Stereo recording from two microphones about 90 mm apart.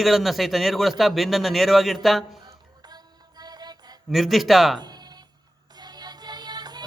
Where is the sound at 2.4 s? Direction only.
50° right (ahead or behind).